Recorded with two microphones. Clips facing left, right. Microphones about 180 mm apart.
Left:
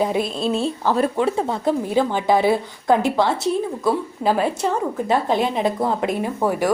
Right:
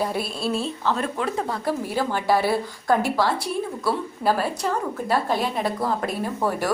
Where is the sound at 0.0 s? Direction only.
20° left (ahead or behind).